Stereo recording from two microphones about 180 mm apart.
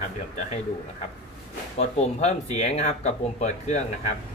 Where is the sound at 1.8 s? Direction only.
35° left (ahead or behind).